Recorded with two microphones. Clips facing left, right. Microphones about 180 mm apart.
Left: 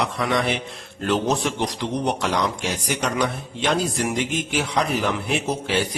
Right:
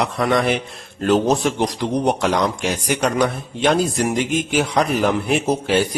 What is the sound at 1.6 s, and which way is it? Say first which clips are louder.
A man's voice: right 5 dB; 50° right (ahead or behind).